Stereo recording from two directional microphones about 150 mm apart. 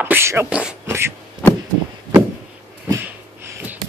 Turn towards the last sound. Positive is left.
turn(degrees=-15)  # may be behind; listen again after turning